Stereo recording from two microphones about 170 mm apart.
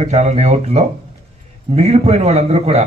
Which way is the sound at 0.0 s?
40° right (ahead or behind).